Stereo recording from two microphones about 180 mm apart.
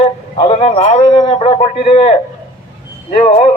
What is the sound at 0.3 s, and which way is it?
A man's voice, 35° left (ahead or behind).